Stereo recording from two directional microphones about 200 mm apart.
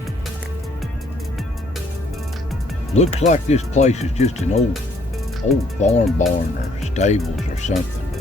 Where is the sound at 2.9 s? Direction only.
35° left (ahead or behind).